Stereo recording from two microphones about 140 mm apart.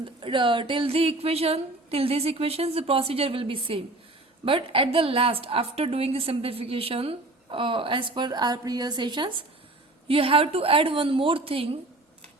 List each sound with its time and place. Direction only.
0.0 s a woman's voice: 35° right (ahead or behind)